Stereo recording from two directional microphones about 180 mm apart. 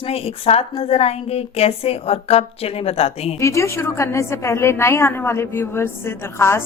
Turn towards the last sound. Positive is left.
turn(degrees=15)  # may be behind; listen again after turning